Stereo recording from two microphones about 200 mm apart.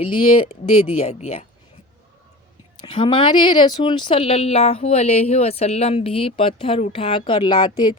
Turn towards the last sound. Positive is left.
turn(degrees=20)  # may be behind; listen again after turning